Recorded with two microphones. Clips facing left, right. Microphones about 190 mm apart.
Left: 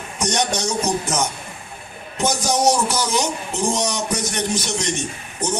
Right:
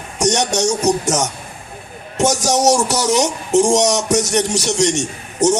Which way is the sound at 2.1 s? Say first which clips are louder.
Right 4 dB; 80° right.